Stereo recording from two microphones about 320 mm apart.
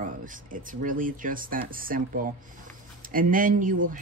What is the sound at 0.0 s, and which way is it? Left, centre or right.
Speech, right.